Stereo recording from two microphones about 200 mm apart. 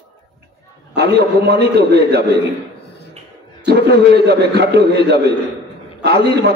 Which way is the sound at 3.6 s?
55° right (ahead or behind).